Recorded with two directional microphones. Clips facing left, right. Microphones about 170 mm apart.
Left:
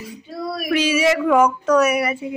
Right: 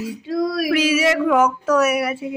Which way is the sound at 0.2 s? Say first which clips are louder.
Right 6 dB; 90° right.